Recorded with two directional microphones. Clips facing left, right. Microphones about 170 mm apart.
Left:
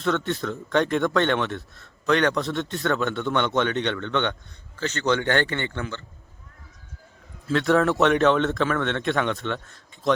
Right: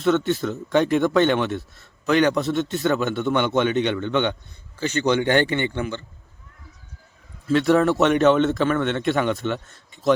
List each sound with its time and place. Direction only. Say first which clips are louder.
0.0 s a man's voice: right 5 dB; 5° right (ahead or behind)
7.4 s a man's voice: right 3 dB; centre (ahead or behind)